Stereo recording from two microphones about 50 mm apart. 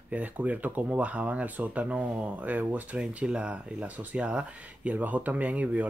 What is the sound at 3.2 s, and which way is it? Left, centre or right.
Speech, right.